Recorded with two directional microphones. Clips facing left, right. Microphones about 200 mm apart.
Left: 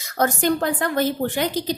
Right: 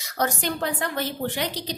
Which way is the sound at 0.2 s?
50° left (ahead or behind).